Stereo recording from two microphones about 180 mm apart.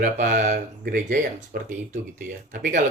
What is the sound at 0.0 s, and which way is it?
A man's voice, 45° right (ahead or behind).